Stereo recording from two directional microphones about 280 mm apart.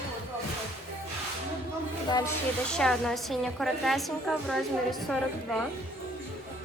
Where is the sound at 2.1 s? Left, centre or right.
Centre.